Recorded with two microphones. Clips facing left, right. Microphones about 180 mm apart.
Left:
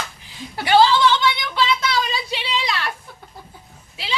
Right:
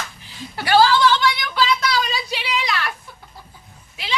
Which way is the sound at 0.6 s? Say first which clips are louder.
Even; 20° left (ahead or behind).